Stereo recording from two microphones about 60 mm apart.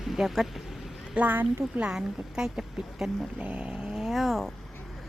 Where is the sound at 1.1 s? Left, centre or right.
Right.